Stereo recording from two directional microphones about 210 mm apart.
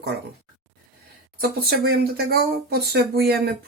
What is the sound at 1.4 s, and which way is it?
Speech, 45° right (ahead or behind).